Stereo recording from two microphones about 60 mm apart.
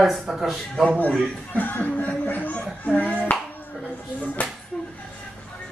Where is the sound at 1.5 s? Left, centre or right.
Left.